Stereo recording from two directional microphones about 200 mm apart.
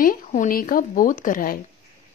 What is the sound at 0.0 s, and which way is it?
A woman's voice, 45° left (ahead or behind).